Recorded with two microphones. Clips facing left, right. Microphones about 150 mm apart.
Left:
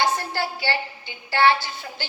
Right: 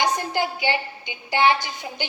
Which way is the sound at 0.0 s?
20° right (ahead or behind).